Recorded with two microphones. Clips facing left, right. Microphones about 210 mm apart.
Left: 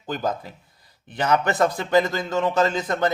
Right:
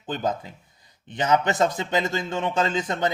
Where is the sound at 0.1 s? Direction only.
25° right (ahead or behind).